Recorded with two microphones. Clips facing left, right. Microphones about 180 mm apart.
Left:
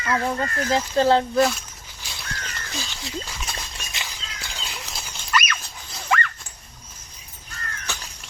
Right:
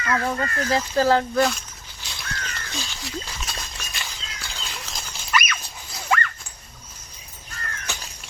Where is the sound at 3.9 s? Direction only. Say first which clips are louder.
Left 1 dB; 20° left (ahead or behind).